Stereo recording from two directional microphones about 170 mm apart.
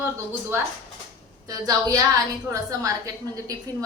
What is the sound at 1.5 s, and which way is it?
A woman's voice, 20° right (ahead or behind).